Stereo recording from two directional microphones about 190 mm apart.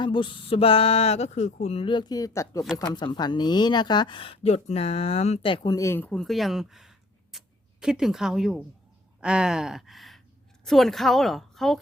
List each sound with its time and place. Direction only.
0.0 s a woman's voice: 25° left (ahead or behind); by 11.8 s centre (ahead or behind)